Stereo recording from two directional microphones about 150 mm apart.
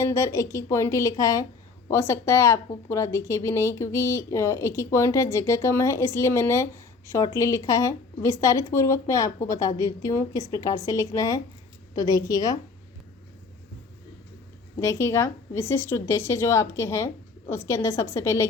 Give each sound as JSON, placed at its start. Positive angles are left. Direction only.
{"t": 0.0, "sound": "speech", "side_deg": 20}
{"t": 14.8, "sound": "speech", "side_deg": 20}